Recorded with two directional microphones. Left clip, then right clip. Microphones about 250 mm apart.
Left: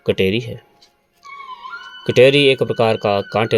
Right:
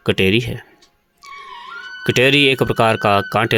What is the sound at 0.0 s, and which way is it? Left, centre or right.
Speech, right.